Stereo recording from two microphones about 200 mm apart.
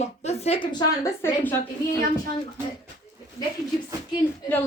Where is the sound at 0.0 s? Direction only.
30° left (ahead or behind).